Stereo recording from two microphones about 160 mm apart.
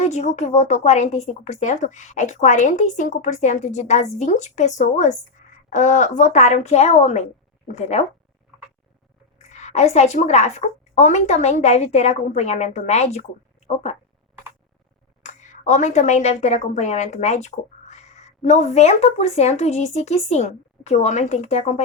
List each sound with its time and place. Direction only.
0.0 s speech: 45° left (ahead or behind)
9.4 s a woman's voice: 45° left (ahead or behind)
15.2 s a woman's voice: 50° left (ahead or behind)